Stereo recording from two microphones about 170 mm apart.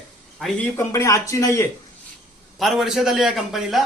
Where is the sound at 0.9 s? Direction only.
20° left (ahead or behind).